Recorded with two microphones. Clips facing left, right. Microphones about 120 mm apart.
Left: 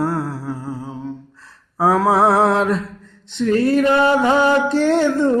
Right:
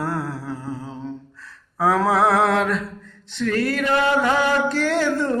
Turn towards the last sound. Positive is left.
turn(degrees=25)  # may be behind; listen again after turning